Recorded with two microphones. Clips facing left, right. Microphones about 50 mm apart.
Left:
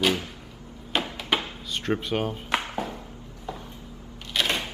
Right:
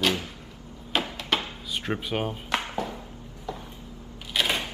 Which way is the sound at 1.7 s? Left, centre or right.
Centre.